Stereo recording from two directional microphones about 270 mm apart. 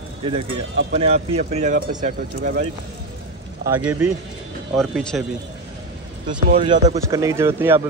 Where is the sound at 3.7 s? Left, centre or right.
Centre.